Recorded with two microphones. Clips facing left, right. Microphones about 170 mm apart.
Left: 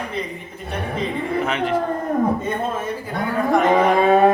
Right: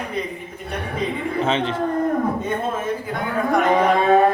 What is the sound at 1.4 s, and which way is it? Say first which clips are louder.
Speech: right 3 dB; 25° right (ahead or behind).